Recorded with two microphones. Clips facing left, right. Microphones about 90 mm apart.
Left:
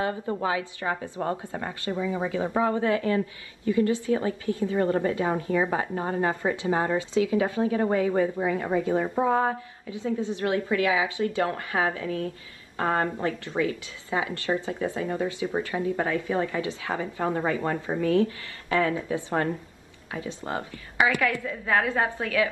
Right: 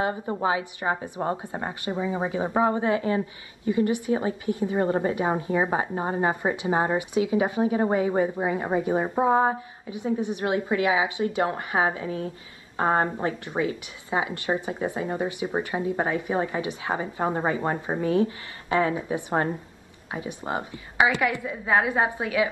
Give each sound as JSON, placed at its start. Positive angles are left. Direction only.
{"t": 0.0, "sound": "speech", "side_deg": -25}